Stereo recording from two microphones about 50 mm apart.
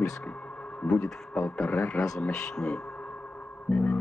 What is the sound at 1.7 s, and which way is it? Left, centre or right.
Speech, left.